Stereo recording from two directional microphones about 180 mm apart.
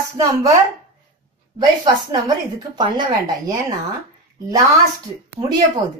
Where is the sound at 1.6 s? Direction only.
20° right (ahead or behind).